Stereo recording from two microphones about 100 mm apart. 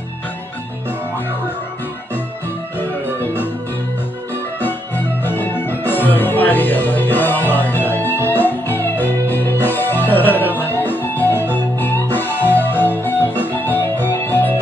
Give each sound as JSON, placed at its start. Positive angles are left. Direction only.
{"t": 4.6, "sound": "music", "side_deg": 20}